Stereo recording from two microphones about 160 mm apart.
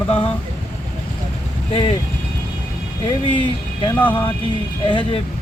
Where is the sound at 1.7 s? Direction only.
35° left (ahead or behind).